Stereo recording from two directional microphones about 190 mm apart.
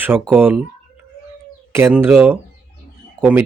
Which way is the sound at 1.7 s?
10° right (ahead or behind).